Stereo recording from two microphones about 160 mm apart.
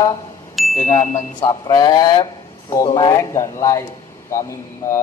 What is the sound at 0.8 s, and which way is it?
Ding, 20° left (ahead or behind).